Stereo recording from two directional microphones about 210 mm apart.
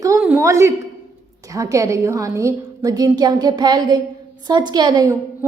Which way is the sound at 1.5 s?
15° right (ahead or behind).